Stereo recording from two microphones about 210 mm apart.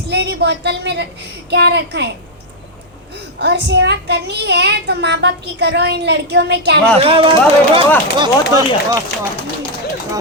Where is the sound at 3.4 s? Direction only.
55° right (ahead or behind).